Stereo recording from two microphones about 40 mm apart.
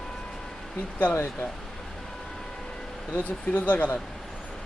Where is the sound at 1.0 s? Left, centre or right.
Left.